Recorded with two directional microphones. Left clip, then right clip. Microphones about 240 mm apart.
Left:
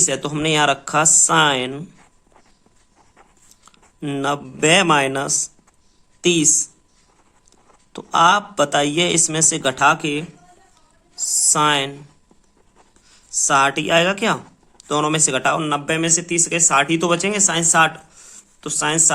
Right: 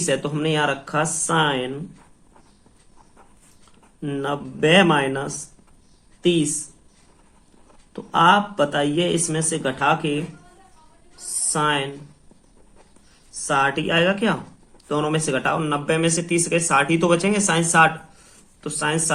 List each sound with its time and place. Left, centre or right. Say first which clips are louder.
0.0 s speech: left 2 dB; left
4.0 s speech: left 4 dB; left
7.9 s speech: left 1 dB; left
11.5 s speech: left 3 dB; left
13.5 s speech: left 4 dB; left